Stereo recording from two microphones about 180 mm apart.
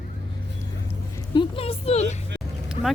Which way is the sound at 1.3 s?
30° left (ahead or behind).